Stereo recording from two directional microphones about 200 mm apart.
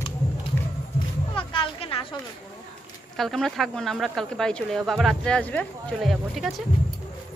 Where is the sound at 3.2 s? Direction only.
Centre (ahead or behind).